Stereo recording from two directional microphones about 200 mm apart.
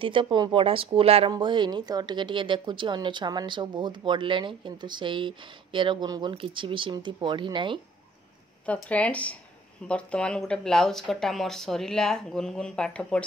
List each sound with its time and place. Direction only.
0.0 s speech: 25° right (ahead or behind)
8.6 s speech: 5° left (ahead or behind)